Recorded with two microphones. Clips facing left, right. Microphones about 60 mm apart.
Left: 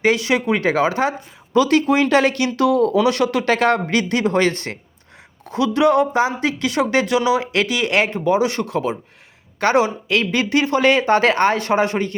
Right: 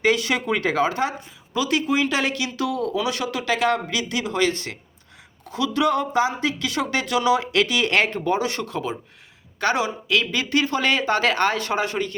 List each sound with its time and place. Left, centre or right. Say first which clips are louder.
0.0 s speech: left 3 dB; left
1.5 s speech: left 7 dB; left
7.7 s speech: left 2 dB; centre
9.6 s speech: left 6 dB; left